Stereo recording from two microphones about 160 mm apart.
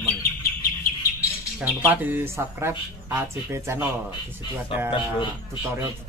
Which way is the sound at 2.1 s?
15° right (ahead or behind).